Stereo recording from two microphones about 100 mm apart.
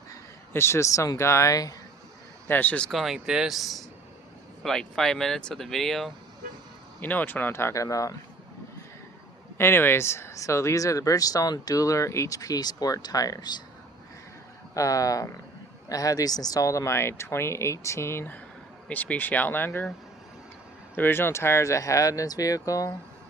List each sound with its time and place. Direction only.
0.1 s speech: 25° left (ahead or behind)
2.5 s speech: 15° left (ahead or behind)
2.9 s speech: 5° right (ahead or behind)
7.0 s speech: 15° left (ahead or behind); by 8.1 s 35° left (ahead or behind)
9.6 s speech: 25° left (ahead or behind); by 13.6 s 40° left (ahead or behind)
14.8 s speech: 35° left (ahead or behind)
20.9 s speech: 20° left (ahead or behind)